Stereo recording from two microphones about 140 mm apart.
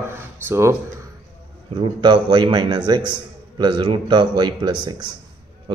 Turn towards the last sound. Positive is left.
turn(degrees=-30)  # may be behind; listen again after turning